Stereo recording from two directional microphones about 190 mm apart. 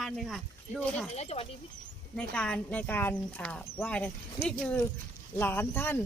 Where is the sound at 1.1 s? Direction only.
35° left (ahead or behind).